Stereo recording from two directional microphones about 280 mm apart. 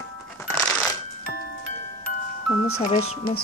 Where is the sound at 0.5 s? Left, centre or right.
Centre.